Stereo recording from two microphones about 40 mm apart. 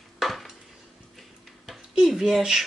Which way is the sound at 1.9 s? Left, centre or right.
Centre.